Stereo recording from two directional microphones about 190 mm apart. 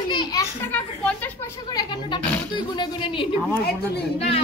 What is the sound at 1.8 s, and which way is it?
Speech, 25° left (ahead or behind).